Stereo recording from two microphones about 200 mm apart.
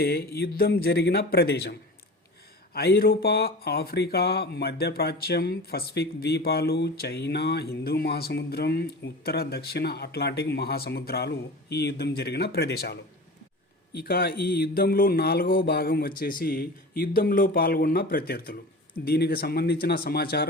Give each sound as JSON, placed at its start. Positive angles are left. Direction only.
{"t": 0.0, "sound": "speech", "side_deg": 50}
{"t": 2.7, "sound": "speech", "side_deg": 50}